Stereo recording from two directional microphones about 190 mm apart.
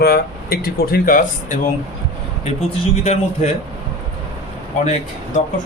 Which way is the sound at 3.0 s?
35° left (ahead or behind).